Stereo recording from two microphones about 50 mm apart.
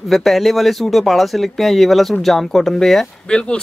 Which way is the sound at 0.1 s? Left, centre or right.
Centre.